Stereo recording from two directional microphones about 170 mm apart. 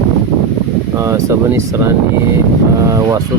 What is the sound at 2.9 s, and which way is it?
Speech, 20° right (ahead or behind).